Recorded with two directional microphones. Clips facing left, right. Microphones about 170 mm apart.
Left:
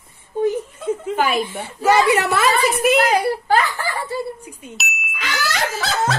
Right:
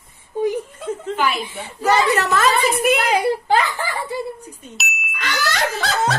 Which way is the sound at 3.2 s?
20° right (ahead or behind).